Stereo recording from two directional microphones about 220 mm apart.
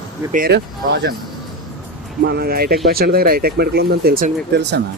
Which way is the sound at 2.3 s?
45° right (ahead or behind).